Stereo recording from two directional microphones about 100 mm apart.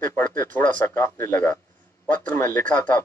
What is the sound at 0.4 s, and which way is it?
A man's voice, 15° left (ahead or behind).